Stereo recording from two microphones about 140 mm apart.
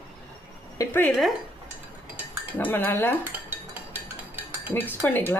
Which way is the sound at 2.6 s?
15° left (ahead or behind).